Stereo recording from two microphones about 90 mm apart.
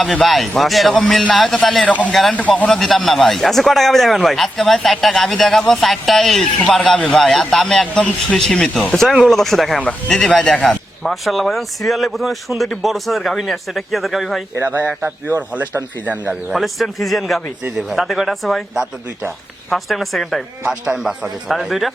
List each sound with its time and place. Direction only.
0.0 s speech: centre (ahead or behind)
1.8 s speech: 15° left (ahead or behind)
2.6 s speech: 5° left (ahead or behind)
7.9 s speech: 15° left (ahead or behind); by 14.4 s centre (ahead or behind)
14.6 s speech: 25° right (ahead or behind)
16.3 s speech: centre (ahead or behind)